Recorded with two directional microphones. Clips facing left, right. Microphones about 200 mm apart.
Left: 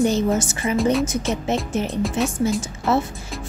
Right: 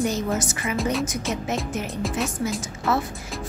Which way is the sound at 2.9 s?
25° left (ahead or behind).